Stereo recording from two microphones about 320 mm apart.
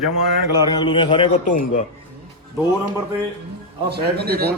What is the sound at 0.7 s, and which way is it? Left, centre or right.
A man's voice, centre.